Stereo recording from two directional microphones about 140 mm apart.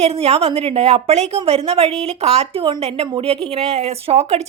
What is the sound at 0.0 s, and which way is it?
A woman's voice, 50° right (ahead or behind).